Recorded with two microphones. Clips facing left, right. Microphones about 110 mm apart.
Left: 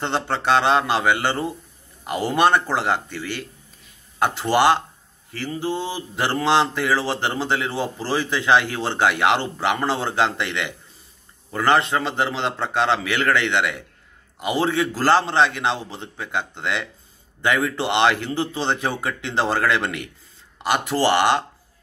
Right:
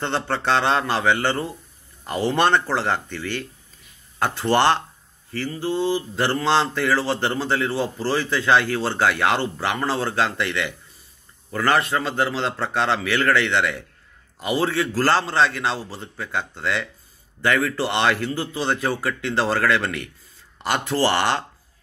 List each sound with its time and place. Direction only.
0.0 s speech: 15° left (ahead or behind)